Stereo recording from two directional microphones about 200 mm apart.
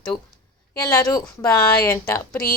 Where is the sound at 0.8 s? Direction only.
20° left (ahead or behind).